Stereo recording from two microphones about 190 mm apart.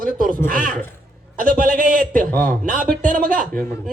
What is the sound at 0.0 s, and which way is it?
A man's voice, 45° right (ahead or behind).